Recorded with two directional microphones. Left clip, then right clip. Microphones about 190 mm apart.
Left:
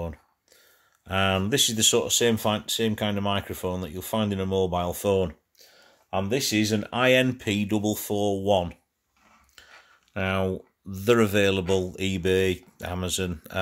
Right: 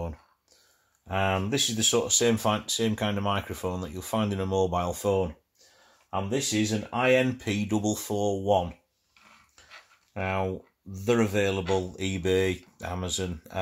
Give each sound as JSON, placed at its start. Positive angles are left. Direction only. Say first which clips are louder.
{"t": 1.0, "sound": "speech", "louder": "left 3 dB", "side_deg": 45}
{"t": 6.0, "sound": "speech", "louder": "left 3 dB", "side_deg": 55}
{"t": 10.1, "sound": "speech", "louder": "left 3 dB", "side_deg": 50}